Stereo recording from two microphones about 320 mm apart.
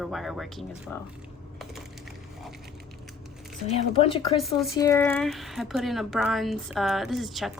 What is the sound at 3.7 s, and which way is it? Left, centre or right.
Speech, centre.